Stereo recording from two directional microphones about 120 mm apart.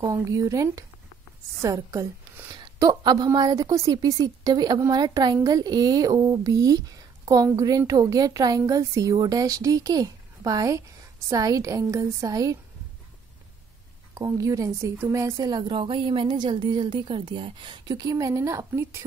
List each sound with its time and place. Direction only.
0.0 s a woman's voice: 30° right (ahead or behind)
14.1 s a woman's voice: 30° right (ahead or behind)